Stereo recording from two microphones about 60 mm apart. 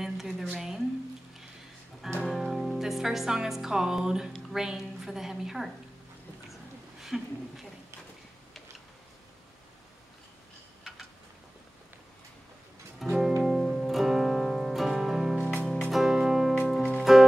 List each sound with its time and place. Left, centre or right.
0.0 s a sound: centre
2.2 s music: centre
4.3 s a woman's voice: centre
6.5 s a sound: centre
13.0 s music: centre
15.5 s music: centre
15.9 s music: centre